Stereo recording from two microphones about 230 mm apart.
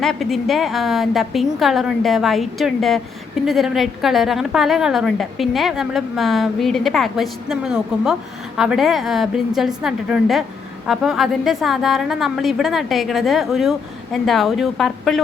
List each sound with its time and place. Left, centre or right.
0.0 s a woman's voice: centre